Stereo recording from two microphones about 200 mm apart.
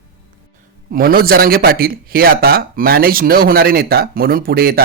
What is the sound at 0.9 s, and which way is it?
A man's voice, 45° right (ahead or behind).